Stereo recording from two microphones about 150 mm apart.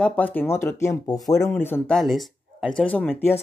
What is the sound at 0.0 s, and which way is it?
Speech, 10° left (ahead or behind).